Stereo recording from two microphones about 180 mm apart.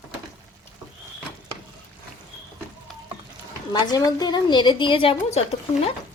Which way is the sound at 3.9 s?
20° left (ahead or behind).